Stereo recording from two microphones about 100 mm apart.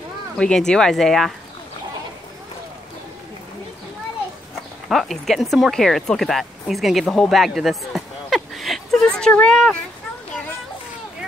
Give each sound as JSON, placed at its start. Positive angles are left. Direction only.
{"t": 0.4, "sound": "speech", "side_deg": 5}
{"t": 4.8, "sound": "speech", "side_deg": 0}